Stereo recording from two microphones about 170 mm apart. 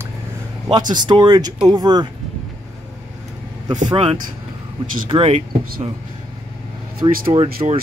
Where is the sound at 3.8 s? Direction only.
30° right (ahead or behind).